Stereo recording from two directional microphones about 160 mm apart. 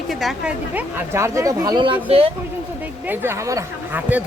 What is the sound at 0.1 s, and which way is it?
A woman's voice, centre (ahead or behind).